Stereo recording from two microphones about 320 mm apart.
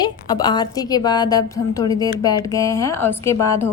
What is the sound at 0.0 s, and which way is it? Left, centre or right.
A woman's voice, centre.